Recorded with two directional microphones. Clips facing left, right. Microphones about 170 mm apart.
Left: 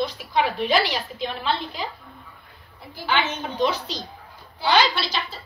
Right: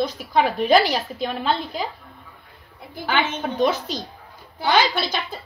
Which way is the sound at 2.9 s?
50° right (ahead or behind).